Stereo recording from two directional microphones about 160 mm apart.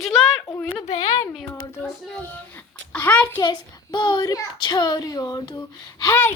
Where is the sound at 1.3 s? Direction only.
Centre (ahead or behind).